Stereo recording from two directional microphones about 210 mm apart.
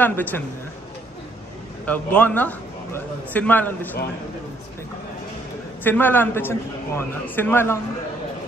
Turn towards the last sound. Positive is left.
turn(degrees=10)  # may be behind; listen again after turning